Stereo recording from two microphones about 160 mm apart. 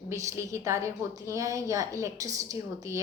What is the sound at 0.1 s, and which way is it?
A woman's voice, 20° right (ahead or behind).